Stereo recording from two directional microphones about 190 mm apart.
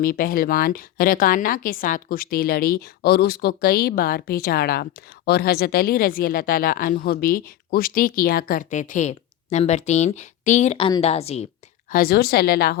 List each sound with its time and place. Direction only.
0.0 s a woman's voice: 50° left (ahead or behind); by 11.4 s 35° left (ahead or behind)
11.9 s a woman's voice: 50° left (ahead or behind)